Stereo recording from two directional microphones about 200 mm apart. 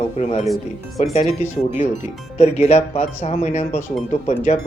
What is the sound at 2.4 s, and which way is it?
Speech, 35° left (ahead or behind).